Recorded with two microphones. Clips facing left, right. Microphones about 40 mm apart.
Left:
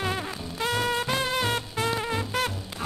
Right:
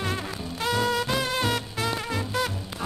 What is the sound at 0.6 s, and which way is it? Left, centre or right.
Music, left.